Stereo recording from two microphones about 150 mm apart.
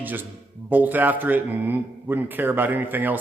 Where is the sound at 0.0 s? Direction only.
10° right (ahead or behind).